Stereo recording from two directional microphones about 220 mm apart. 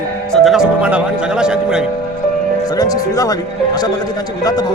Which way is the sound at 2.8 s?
15° left (ahead or behind).